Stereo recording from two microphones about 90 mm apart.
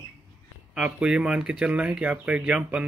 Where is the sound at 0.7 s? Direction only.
10° right (ahead or behind).